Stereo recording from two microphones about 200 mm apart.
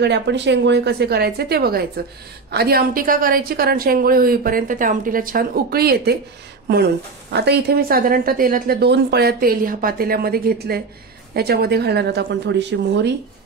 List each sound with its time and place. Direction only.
0.0 s a woman's voice: 60° right (ahead or behind)